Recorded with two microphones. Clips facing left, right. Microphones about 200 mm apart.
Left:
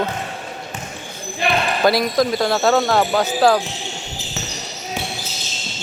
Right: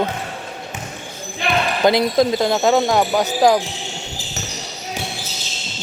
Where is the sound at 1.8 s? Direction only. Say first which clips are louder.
Right 2 dB; 20° right (ahead or behind).